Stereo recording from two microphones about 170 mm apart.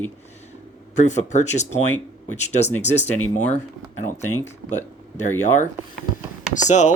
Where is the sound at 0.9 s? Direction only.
45° left (ahead or behind).